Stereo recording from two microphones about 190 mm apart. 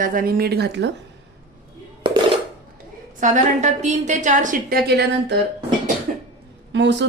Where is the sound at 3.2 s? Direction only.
40° right (ahead or behind); by 5.4 s 60° right (ahead or behind).